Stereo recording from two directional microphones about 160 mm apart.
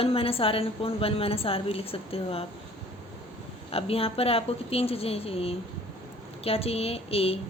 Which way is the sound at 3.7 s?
35° left (ahead or behind).